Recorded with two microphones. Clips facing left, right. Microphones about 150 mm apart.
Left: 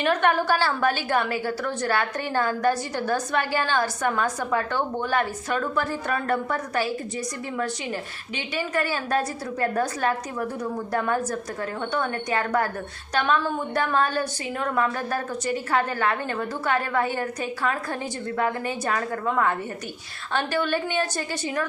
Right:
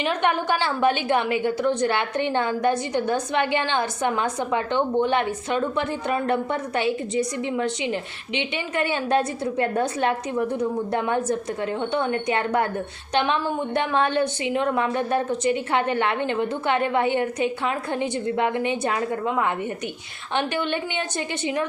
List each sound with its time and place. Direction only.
0.2 s a woman's voice: 20° right (ahead or behind)
8.4 s a woman's voice: 25° right (ahead or behind)